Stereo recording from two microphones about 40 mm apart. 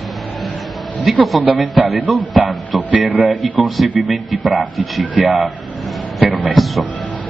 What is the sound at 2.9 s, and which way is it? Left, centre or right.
Speech, right.